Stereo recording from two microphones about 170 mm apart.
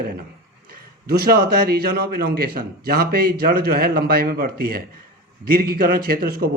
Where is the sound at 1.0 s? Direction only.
65° right (ahead or behind).